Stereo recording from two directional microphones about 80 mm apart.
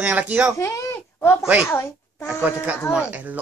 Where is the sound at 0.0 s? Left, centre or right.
Right.